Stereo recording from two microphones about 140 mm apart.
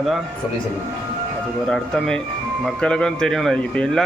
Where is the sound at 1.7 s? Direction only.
5° left (ahead or behind).